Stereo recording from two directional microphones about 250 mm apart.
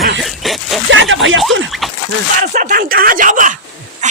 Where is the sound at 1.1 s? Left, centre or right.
Right.